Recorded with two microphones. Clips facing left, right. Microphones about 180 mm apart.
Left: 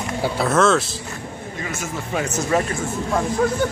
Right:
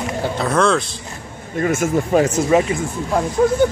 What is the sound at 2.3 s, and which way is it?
Speech, 10° right (ahead or behind).